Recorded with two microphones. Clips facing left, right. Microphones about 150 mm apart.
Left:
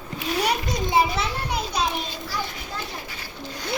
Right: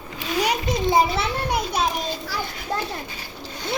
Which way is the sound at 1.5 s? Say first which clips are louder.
Right 2 dB; 55° right (ahead or behind).